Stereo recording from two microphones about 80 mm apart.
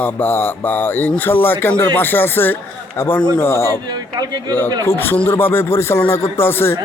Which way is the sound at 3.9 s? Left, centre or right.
Right.